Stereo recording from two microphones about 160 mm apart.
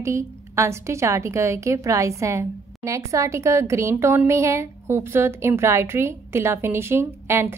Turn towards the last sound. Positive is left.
turn(degrees=-15)  # may be behind; listen again after turning